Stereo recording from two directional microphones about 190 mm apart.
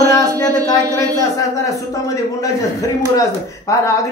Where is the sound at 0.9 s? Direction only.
15° left (ahead or behind).